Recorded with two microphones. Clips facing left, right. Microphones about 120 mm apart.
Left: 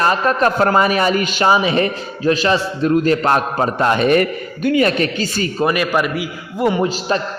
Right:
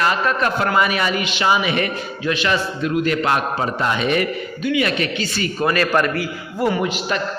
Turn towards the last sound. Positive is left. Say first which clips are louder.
# left 4 dB
turn(degrees=35)  # may be behind; listen again after turning